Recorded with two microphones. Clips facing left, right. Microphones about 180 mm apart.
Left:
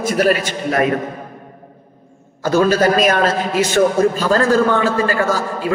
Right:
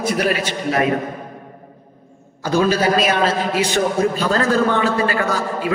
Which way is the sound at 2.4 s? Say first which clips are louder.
Left 3 dB; 50° left (ahead or behind).